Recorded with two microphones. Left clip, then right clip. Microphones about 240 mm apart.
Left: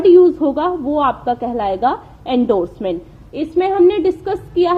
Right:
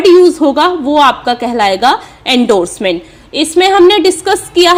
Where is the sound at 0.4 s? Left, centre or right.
Right.